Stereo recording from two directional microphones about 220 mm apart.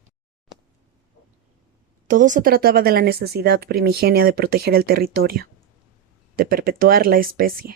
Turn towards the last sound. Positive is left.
turn(degrees=-40)  # may be behind; listen again after turning